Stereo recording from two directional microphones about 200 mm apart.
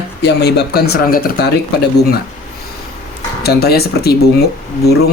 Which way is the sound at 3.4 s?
50° left (ahead or behind).